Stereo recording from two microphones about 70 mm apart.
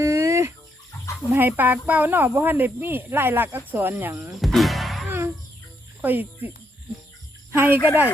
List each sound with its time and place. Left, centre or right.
0.0 s a sound: right
1.3 s speech: right
4.1 s speech: right
4.4 s music: centre
5.0 s a sound: right
6.0 s speech: right
7.5 s speech: right